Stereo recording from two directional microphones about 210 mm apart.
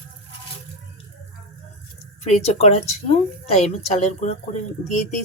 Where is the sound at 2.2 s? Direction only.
30° left (ahead or behind).